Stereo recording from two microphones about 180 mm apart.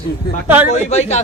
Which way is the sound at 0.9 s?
35° left (ahead or behind).